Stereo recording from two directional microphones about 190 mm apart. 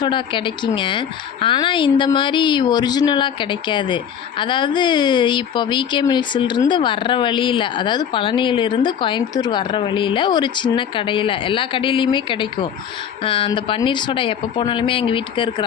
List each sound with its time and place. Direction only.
0.0 s a woman's voice: 25° left (ahead or behind)